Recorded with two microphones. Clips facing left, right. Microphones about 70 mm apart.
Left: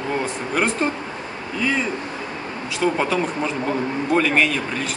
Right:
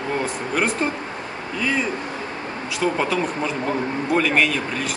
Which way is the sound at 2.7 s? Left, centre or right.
Centre.